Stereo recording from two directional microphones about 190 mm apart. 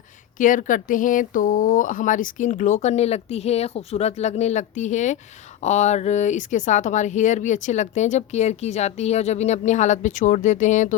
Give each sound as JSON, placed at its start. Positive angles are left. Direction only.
{"t": 0.3, "sound": "speech", "side_deg": 45}